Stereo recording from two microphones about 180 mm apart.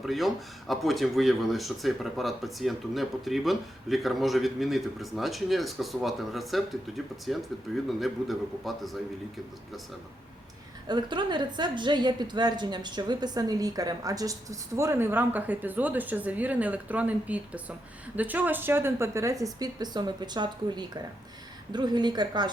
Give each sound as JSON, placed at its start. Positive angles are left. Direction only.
{"t": 0.0, "sound": "speech", "side_deg": 0}
{"t": 10.8, "sound": "a woman's voice", "side_deg": -25}